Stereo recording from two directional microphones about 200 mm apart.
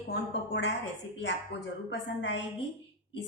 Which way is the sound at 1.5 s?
55° left (ahead or behind).